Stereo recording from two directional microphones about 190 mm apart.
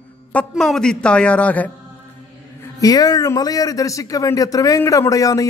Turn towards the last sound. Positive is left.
turn(degrees=15)  # may be behind; listen again after turning